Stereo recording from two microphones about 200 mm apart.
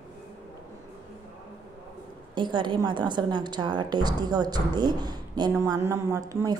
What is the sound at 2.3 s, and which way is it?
A woman's voice, 25° right (ahead or behind).